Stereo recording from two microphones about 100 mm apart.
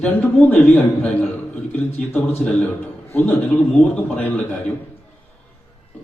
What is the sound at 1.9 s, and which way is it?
A man's voice, 15° left (ahead or behind).